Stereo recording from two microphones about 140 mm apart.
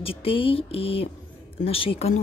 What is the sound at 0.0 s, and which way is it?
A woman's voice, 40° left (ahead or behind).